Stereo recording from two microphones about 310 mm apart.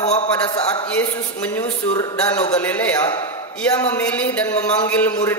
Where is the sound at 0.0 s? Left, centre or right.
Centre.